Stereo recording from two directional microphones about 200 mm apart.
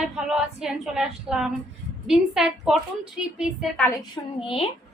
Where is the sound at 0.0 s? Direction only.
Centre (ahead or behind).